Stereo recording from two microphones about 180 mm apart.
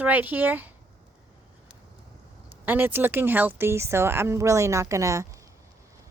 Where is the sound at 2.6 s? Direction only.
10° right (ahead or behind).